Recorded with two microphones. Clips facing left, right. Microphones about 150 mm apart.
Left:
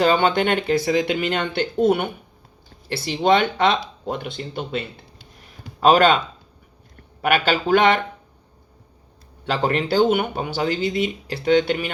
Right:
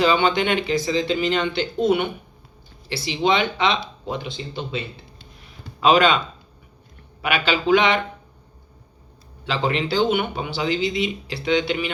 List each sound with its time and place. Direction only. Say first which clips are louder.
0.0 s speech: left 1 dB; 50° left (ahead or behind)
5.8 s speech: left 2 dB; 45° left (ahead or behind)
7.2 s speech: left 3 dB; 45° left (ahead or behind)
9.5 s speech: left 2 dB; 50° left (ahead or behind)